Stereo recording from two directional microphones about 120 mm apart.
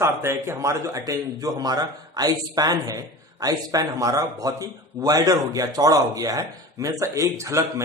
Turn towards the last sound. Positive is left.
turn(degrees=-25)  # may be behind; listen again after turning